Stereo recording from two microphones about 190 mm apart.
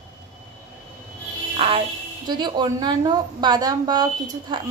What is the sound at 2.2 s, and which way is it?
A woman's voice, 25° right (ahead or behind).